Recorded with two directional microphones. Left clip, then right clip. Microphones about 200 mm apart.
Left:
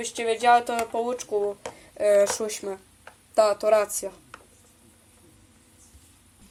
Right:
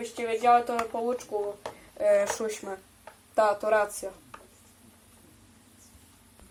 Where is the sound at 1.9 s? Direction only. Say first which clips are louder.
Left 4 dB; 45° left (ahead or behind).